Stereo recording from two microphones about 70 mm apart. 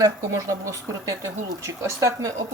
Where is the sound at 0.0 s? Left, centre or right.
Right.